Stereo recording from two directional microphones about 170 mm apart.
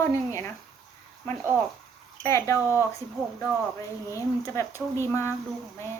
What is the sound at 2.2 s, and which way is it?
Speech, 15° left (ahead or behind).